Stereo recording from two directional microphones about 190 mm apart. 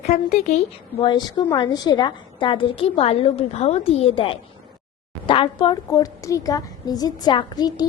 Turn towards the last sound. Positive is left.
turn(degrees=20)  # may be behind; listen again after turning